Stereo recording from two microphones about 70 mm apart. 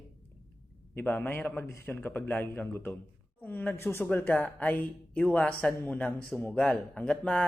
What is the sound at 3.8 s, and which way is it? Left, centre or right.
Speech, left.